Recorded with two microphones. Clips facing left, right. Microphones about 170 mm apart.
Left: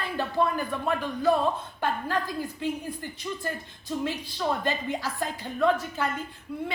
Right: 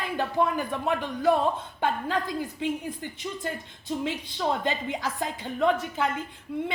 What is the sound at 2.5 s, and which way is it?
A woman's voice, 20° right (ahead or behind).